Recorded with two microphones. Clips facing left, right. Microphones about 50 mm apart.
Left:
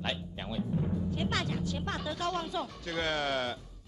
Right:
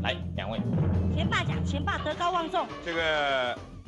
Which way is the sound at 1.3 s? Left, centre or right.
Right.